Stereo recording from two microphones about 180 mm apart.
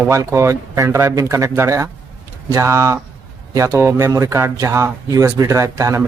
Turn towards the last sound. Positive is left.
turn(degrees=-15)  # may be behind; listen again after turning